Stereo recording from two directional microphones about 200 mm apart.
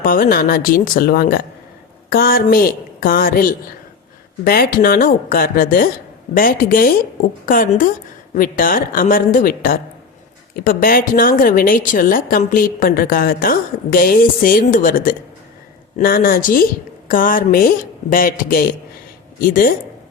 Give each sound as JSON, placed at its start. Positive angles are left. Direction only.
{"t": 0.0, "sound": "a woman's voice", "side_deg": 45}